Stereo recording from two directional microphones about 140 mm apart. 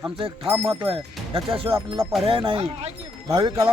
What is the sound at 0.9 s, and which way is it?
Speech, 40° right (ahead or behind).